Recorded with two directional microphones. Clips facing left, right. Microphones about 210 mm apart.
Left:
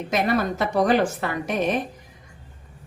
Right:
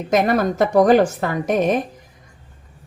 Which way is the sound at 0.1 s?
45° right (ahead or behind).